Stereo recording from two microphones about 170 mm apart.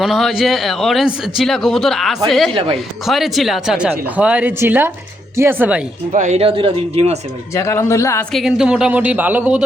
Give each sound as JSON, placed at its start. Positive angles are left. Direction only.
{"t": 0.0, "sound": "speech", "side_deg": 0}
{"t": 2.5, "sound": "speech", "side_deg": -30}
{"t": 3.1, "sound": "speech", "side_deg": 0}
{"t": 6.1, "sound": "speech", "side_deg": -40}
{"t": 7.5, "sound": "speech", "side_deg": 15}
{"t": 8.3, "sound": "speech", "side_deg": 0}